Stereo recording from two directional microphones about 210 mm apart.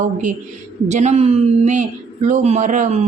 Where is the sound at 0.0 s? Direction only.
35° right (ahead or behind).